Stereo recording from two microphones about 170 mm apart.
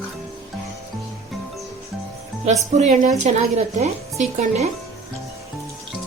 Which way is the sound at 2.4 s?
40° right (ahead or behind).